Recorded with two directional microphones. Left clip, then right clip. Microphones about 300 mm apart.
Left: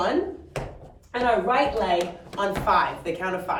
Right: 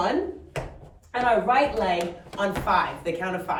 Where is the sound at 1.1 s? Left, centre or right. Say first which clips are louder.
Right 1 dB; centre.